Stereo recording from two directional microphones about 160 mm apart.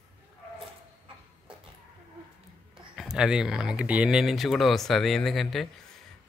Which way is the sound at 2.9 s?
5° right (ahead or behind).